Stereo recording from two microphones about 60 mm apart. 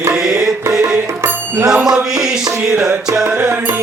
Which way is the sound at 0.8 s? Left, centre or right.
Right.